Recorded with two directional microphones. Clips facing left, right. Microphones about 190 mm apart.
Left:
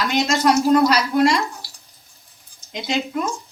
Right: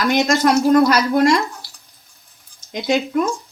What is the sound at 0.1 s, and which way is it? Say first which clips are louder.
Speech: right 3 dB; 50° right (ahead or behind).